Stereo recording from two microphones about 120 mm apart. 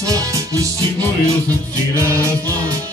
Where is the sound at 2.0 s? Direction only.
25° right (ahead or behind).